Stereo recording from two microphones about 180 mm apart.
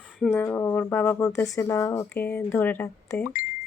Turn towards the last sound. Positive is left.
turn(degrees=50)  # may be behind; listen again after turning